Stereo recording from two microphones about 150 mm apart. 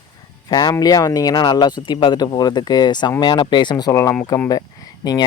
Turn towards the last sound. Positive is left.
turn(degrees=25)  # may be behind; listen again after turning